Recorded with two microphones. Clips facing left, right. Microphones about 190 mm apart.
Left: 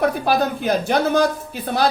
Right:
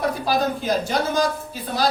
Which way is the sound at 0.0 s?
60° left (ahead or behind).